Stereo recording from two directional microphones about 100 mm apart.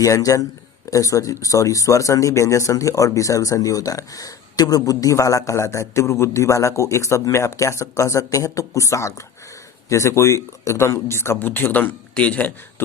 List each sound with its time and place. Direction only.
0.0 s speech: 35° left (ahead or behind); by 12.5 s 15° left (ahead or behind)